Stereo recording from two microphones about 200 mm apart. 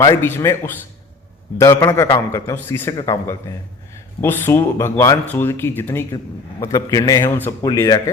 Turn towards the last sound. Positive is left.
turn(degrees=15)  # may be behind; listen again after turning